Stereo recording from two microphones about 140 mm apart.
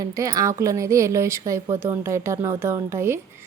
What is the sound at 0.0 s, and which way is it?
A woman's voice, 25° right (ahead or behind).